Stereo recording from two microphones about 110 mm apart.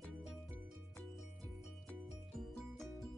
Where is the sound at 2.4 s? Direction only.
Centre (ahead or behind).